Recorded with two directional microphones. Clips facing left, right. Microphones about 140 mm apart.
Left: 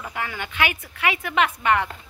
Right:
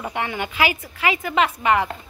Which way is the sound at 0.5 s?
5° right (ahead or behind).